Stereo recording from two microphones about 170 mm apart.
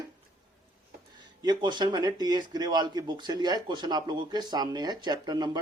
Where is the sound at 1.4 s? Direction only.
25° right (ahead or behind).